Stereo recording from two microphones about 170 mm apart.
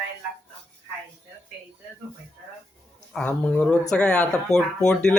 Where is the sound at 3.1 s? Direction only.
5° left (ahead or behind).